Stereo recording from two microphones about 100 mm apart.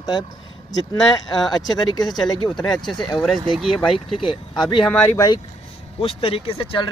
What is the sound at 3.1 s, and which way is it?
Speech, centre (ahead or behind).